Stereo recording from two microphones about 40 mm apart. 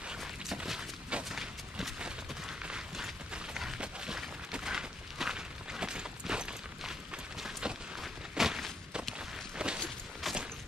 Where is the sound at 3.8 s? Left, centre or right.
Centre.